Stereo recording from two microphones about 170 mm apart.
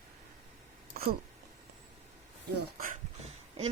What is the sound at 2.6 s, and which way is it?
Speech, 55° right (ahead or behind).